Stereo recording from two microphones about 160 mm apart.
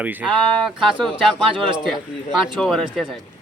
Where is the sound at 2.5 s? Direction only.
Centre (ahead or behind).